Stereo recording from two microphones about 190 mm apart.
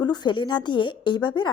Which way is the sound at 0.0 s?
20° left (ahead or behind).